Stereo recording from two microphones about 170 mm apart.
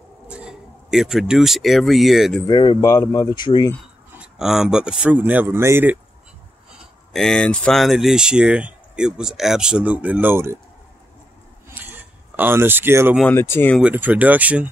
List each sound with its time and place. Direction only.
0.3 s speech: 5° right (ahead or behind)
2.4 s speech: 25° left (ahead or behind)
4.2 s speech: 5° right (ahead or behind)
7.1 s speech: centre (ahead or behind); by 10.6 s 15° right (ahead or behind)
11.7 s a sound: 10° right (ahead or behind)
13.2 s speech: 15° left (ahead or behind)
13.7 s speech: 10° right (ahead or behind)